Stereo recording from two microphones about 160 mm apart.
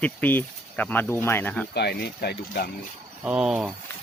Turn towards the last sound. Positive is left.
turn(degrees=-5)  # may be behind; listen again after turning